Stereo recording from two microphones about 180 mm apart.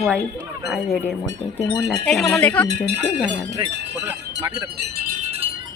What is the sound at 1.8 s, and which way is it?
Speech, centre (ahead or behind).